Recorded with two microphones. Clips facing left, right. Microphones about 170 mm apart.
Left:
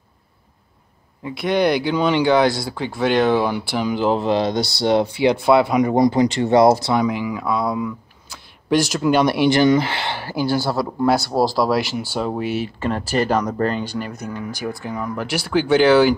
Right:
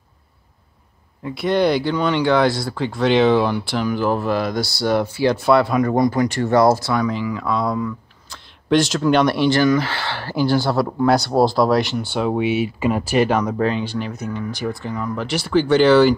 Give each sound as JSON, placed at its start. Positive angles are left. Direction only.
{"t": 1.2, "sound": "speech", "side_deg": -5}
{"t": 12.5, "sound": "speech", "side_deg": -5}